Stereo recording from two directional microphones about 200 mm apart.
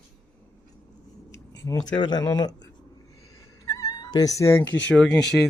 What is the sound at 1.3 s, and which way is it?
Speech, 15° left (ahead or behind).